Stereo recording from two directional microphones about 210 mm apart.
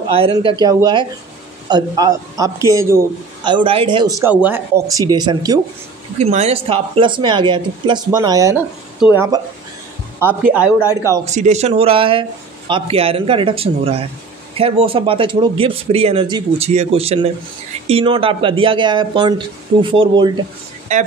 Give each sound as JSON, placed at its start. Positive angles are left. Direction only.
{"t": 0.1, "sound": "speech", "side_deg": -25}
{"t": 3.4, "sound": "speech", "side_deg": -25}
{"t": 6.1, "sound": "speech", "side_deg": -30}
{"t": 11.2, "sound": "speech", "side_deg": -35}
{"t": 20.9, "sound": "speech", "side_deg": -35}